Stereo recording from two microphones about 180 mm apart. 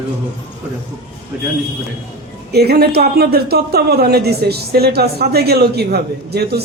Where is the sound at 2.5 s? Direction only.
60° right (ahead or behind).